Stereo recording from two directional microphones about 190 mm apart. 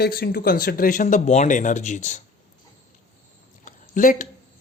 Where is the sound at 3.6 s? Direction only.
45° left (ahead or behind).